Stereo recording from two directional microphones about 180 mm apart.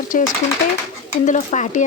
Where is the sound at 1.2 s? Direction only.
40° left (ahead or behind).